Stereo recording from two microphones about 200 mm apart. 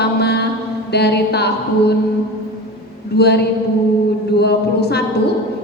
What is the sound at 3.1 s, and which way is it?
Speech, 55° left (ahead or behind).